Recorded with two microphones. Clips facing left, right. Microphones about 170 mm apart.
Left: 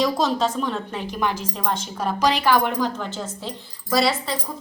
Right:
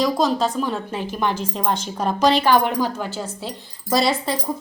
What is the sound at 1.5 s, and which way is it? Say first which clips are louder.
A woman's voice: right 3 dB; 30° right (ahead or behind).